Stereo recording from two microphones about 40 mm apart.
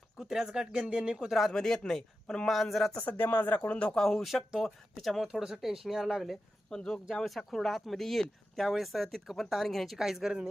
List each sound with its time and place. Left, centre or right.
0.2 s speech: centre
1.3 s speech: centre
1.5 s speech: centre
2.5 s speech: centre
3.0 s speech: left
3.2 s speech: left
3.7 s speech: left
3.9 s speech: centre
4.2 s speech: centre
5.3 s speech: centre
6.7 s speech: centre
7.3 s speech: centre
10.0 s speech: centre